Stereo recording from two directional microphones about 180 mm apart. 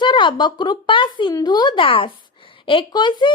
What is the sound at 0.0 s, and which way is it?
Speech, 25° left (ahead or behind).